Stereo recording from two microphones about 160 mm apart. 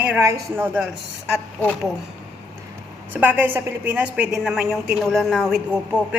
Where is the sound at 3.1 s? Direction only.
10° right (ahead or behind).